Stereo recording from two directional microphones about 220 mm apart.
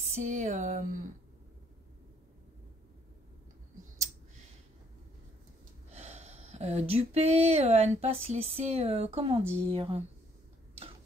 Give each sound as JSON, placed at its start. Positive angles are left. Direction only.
{"t": 0.0, "sound": "speech", "side_deg": -30}
{"t": 5.9, "sound": "speech", "side_deg": -30}